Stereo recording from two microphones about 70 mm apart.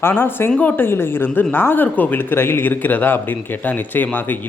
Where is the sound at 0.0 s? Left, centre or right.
Left.